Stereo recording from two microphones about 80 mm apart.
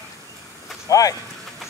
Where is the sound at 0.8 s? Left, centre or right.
Left.